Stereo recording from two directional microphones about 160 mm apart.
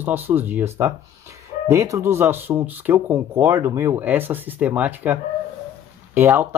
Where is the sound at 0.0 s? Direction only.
10° right (ahead or behind).